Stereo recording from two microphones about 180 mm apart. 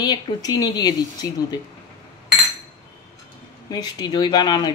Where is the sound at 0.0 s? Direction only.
20° left (ahead or behind).